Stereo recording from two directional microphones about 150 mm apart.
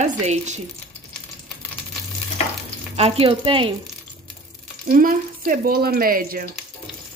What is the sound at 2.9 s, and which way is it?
Speech, 40° right (ahead or behind).